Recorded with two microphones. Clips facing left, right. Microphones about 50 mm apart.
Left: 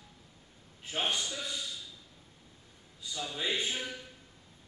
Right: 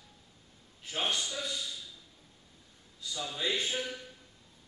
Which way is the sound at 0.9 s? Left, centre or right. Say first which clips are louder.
Even; centre.